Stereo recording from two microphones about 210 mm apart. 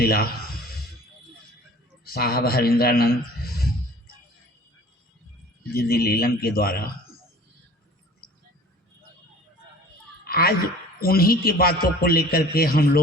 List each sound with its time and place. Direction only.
0.0 s a man's voice: 45° left (ahead or behind)
2.0 s a man's voice: 45° left (ahead or behind)
5.7 s a man's voice: 45° left (ahead or behind)
10.2 s a sound: 45° left (ahead or behind)
11.0 s a man's voice: 45° left (ahead or behind)